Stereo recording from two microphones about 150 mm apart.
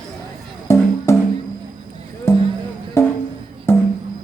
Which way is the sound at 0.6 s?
20° left (ahead or behind).